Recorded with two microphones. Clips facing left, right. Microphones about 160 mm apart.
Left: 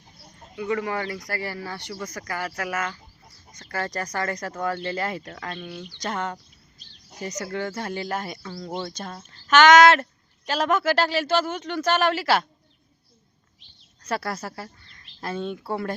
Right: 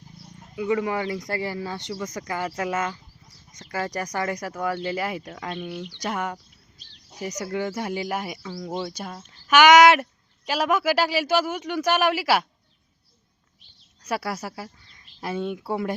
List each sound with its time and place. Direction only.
0.5 s speech: 15° right (ahead or behind)
14.0 s speech: 10° right (ahead or behind)